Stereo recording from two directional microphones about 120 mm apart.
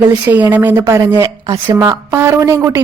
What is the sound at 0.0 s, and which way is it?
Speech, 15° right (ahead or behind).